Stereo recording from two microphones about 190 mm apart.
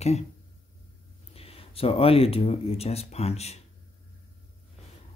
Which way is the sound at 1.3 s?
30° left (ahead or behind).